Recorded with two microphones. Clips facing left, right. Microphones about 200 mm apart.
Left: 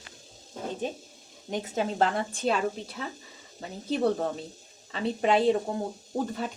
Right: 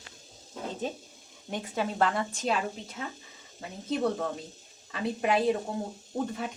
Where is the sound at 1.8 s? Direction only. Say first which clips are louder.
Left 1 dB; 25° left (ahead or behind).